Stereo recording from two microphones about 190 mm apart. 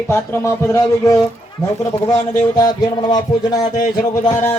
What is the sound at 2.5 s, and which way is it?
Music, 20° left (ahead or behind).